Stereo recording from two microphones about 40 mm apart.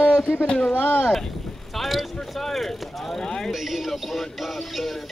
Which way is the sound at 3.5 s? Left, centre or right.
Centre.